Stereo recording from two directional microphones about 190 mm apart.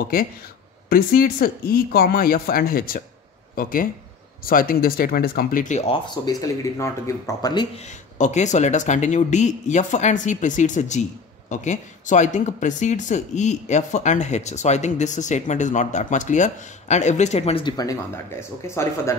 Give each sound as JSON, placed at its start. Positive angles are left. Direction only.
{"t": 0.8, "sound": "speech", "side_deg": 50}
{"t": 6.0, "sound": "speech", "side_deg": 20}
{"t": 7.7, "sound": "speech", "side_deg": 40}